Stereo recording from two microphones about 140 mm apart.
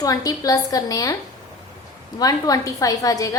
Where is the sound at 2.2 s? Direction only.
25° left (ahead or behind).